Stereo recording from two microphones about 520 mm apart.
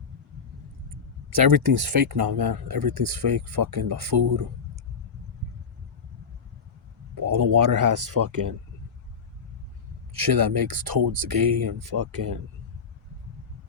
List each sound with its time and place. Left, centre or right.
1.3 s speech: right
7.2 s speech: right
10.2 s speech: right